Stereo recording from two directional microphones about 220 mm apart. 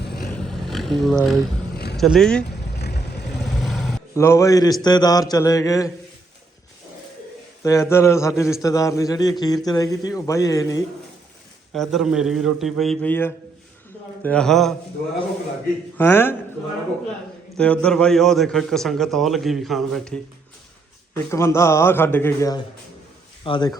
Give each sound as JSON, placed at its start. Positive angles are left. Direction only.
{"t": 0.2, "sound": "a sound", "side_deg": 0}
{"t": 1.7, "sound": "vehicle", "side_deg": 45}
{"t": 2.0, "sound": "a man's voice", "side_deg": 0}
{"t": 2.7, "sound": "vehicle", "side_deg": 50}
{"t": 3.4, "sound": "vehicle", "side_deg": 0}
{"t": 4.1, "sound": "a man's voice", "side_deg": 10}
{"t": 7.6, "sound": "a man's voice", "side_deg": 15}
{"t": 11.7, "sound": "a man's voice", "side_deg": 0}
{"t": 16.0, "sound": "a man's voice", "side_deg": 10}
{"t": 17.6, "sound": "a man's voice", "side_deg": 5}
{"t": 21.1, "sound": "a man's voice", "side_deg": 10}